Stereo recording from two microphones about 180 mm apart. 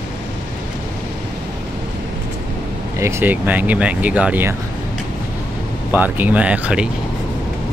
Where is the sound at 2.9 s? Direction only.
15° right (ahead or behind).